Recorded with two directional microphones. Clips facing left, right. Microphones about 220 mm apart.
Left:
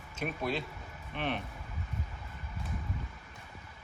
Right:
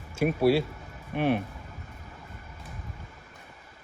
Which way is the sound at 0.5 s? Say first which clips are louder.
Right 12 dB; 10° right (ahead or behind).